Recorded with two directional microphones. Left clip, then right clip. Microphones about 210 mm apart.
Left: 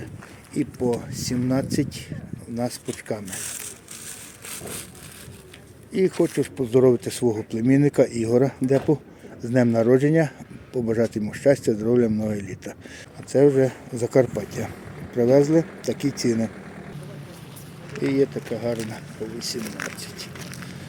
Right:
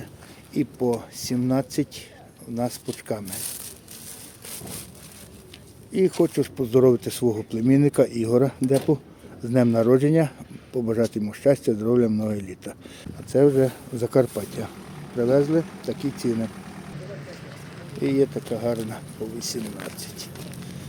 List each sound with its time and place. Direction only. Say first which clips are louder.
0.5 s speech: even; centre (ahead or behind)
5.9 s speech: even; centre (ahead or behind)
15.2 s speech: left 3 dB; 20° left (ahead or behind)
16.6 s vehicle: left 1 dB; 65° right (ahead or behind)
18.0 s speech: even; centre (ahead or behind)